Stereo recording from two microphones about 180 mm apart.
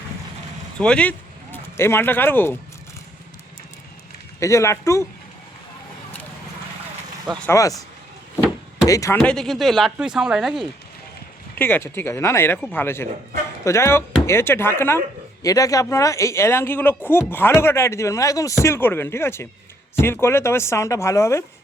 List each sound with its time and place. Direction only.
0.8 s speech: 5° left (ahead or behind)
4.4 s speech: 15° left (ahead or behind)
7.4 s speech: 20° left (ahead or behind)
8.9 s speech: 15° left (ahead or behind)
9.2 s speech: 5° left (ahead or behind)
11.5 s speech: 10° left (ahead or behind)